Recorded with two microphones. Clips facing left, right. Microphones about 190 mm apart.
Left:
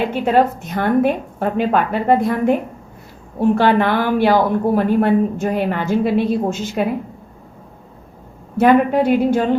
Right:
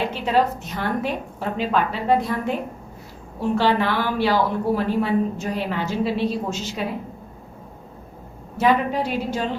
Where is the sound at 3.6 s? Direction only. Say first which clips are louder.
Left 2 dB; 55° left (ahead or behind).